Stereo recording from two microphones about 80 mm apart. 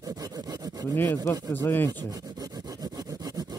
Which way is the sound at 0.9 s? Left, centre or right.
Left.